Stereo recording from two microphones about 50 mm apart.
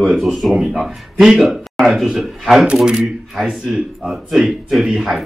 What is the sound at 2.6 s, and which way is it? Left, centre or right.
Speech, centre.